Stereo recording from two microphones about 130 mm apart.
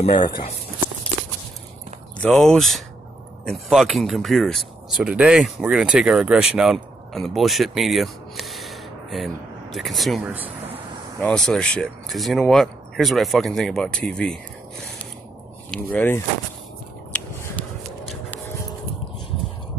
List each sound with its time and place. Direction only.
0.1 s speech: 35° left (ahead or behind)
2.2 s speech: 5° left (ahead or behind)
15.7 s speech: 15° left (ahead or behind)